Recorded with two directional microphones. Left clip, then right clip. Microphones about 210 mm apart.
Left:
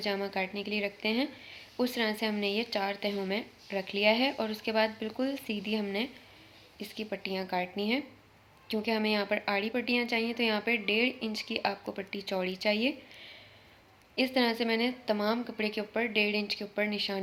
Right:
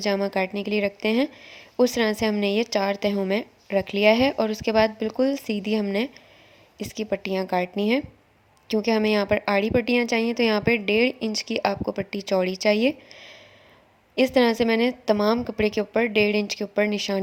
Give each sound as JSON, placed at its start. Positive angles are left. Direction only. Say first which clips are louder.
{"t": 0.0, "sound": "speech", "louder": "right 9 dB", "side_deg": -50}